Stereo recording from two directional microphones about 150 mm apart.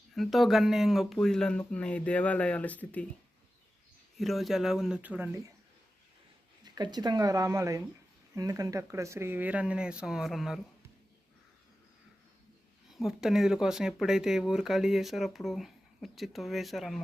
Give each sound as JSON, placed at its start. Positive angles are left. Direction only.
{"t": 0.2, "sound": "speech", "side_deg": 0}
{"t": 4.2, "sound": "speech", "side_deg": 0}
{"t": 6.7, "sound": "speech", "side_deg": -30}
{"t": 12.9, "sound": "speech", "side_deg": -5}